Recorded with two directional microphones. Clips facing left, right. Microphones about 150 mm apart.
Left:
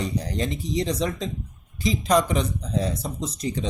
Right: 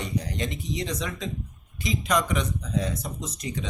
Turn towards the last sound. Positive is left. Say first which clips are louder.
# left 5 dB
turn(degrees=35)  # may be behind; listen again after turning